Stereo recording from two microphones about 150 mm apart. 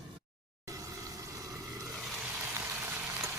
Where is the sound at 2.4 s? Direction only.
15° right (ahead or behind).